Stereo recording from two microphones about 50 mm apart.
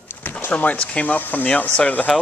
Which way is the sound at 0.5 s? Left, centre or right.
Left.